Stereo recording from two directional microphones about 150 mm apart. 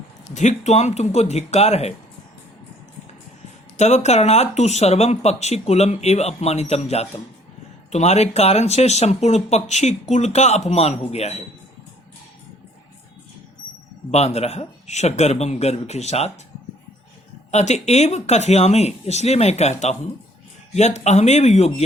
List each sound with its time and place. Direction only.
0.3 s speech: 50° left (ahead or behind)
3.8 s speech: 50° left (ahead or behind)
14.1 s speech: 45° left (ahead or behind)
17.5 s speech: 50° left (ahead or behind)